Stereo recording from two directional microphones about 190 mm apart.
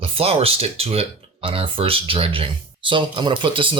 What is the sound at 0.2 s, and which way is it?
Speech, 30° right (ahead or behind).